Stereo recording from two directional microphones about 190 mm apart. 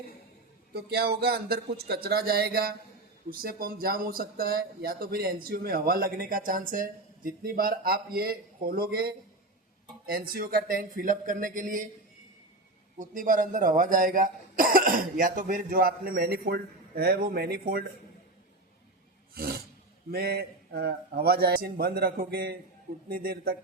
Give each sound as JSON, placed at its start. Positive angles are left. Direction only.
{"t": 0.7, "sound": "a man's voice", "side_deg": -55}
{"t": 13.0, "sound": "speech", "side_deg": -45}
{"t": 19.3, "sound": "roar", "side_deg": -55}
{"t": 20.1, "sound": "a man's voice", "side_deg": -55}